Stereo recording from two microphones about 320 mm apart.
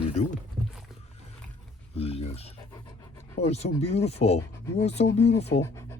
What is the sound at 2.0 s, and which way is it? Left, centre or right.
Speech, centre.